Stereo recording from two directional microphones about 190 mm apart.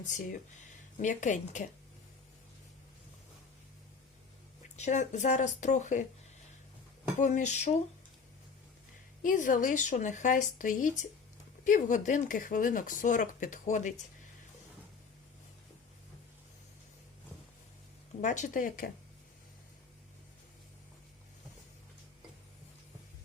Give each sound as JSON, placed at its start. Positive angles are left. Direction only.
{"t": 0.0, "sound": "speech", "side_deg": 45}
{"t": 4.8, "sound": "speech", "side_deg": 40}
{"t": 7.2, "sound": "speech", "side_deg": 40}
{"t": 9.2, "sound": "speech", "side_deg": 45}
{"t": 18.2, "sound": "speech", "side_deg": 40}